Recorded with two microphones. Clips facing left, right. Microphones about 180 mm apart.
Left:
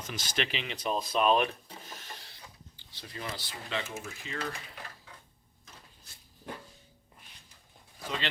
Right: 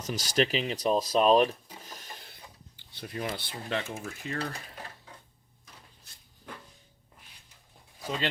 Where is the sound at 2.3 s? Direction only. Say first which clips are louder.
Right 1 dB; 55° right (ahead or behind).